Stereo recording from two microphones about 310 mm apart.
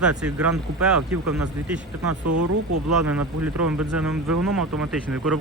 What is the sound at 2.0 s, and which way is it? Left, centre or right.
Speech, right.